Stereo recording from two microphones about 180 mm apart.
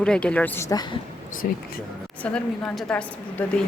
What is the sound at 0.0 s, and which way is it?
Speech, 5° left (ahead or behind).